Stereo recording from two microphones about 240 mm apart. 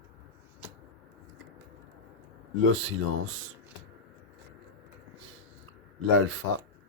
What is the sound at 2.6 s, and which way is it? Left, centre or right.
Speech, right.